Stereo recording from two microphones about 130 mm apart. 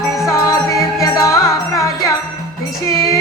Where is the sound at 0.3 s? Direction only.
25° left (ahead or behind).